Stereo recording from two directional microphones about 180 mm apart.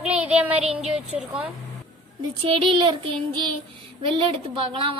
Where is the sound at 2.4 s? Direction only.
30° right (ahead or behind).